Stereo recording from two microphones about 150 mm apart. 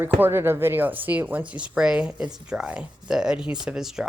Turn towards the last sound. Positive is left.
turn(degrees=-5)  # may be behind; listen again after turning